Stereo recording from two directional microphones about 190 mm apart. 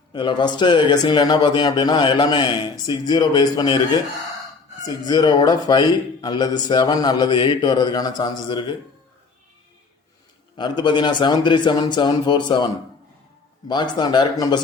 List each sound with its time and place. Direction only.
0.1 s a man's voice: 25° left (ahead or behind)
5.0 s a man's voice: 20° left (ahead or behind)
10.6 s a man's voice: 25° left (ahead or behind)
13.7 s a man's voice: 25° left (ahead or behind)